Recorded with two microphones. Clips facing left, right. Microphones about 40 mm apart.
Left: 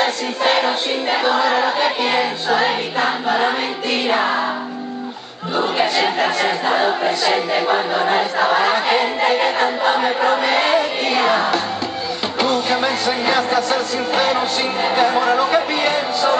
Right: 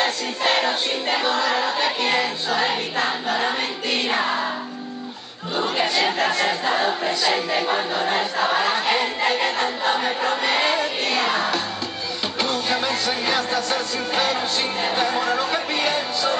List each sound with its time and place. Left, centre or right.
0.0 s choir: centre
4.2 s music: centre
5.6 s choir: centre
8.1 s a sound: centre
12.4 s music: centre